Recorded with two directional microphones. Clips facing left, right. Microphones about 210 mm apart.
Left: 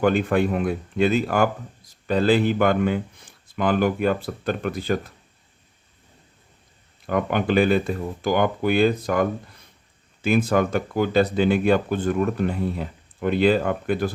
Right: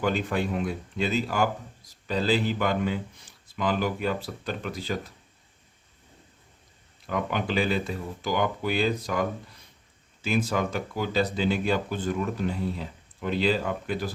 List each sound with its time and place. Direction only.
0.0 s speech: 55° left (ahead or behind)
7.1 s speech: 55° left (ahead or behind)